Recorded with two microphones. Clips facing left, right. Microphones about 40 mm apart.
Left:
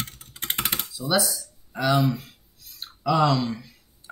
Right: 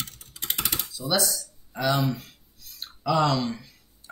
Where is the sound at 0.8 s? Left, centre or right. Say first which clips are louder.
Left 2 dB; centre.